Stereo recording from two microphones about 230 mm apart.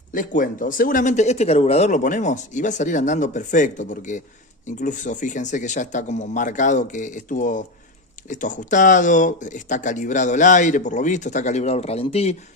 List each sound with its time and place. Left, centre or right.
0.1 s speech: left